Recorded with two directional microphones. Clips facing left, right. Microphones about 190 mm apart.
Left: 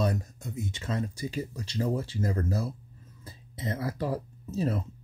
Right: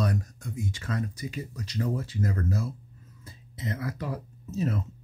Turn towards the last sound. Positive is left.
turn(degrees=30)  # may be behind; listen again after turning